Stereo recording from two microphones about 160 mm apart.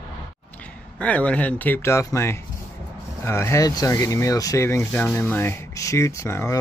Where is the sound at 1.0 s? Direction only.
10° left (ahead or behind).